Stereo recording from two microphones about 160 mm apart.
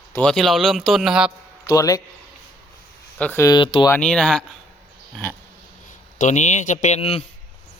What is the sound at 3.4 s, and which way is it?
Speech, 30° left (ahead or behind).